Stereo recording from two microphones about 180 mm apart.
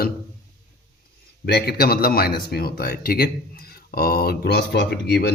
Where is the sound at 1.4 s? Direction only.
60° left (ahead or behind).